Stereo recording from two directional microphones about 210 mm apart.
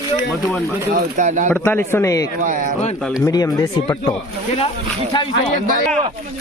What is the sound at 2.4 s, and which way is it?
Speech, 40° right (ahead or behind).